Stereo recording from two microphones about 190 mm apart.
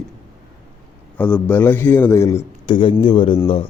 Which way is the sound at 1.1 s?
5° left (ahead or behind).